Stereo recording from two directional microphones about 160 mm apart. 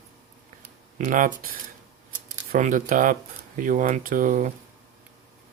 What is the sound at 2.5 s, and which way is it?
Speech, 55° right (ahead or behind).